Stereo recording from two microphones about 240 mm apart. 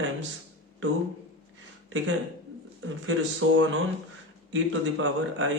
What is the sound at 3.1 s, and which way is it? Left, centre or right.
A man's voice, right.